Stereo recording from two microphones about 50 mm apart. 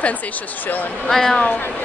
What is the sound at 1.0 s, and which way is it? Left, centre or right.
Speech, centre.